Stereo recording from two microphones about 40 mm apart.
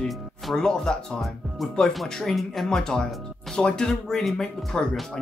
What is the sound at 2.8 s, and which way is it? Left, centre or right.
Speech, centre.